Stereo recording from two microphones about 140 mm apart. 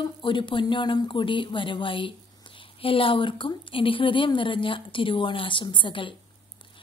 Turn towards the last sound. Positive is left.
turn(degrees=35)  # may be behind; listen again after turning